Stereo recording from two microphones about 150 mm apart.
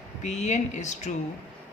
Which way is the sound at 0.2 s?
50° left (ahead or behind).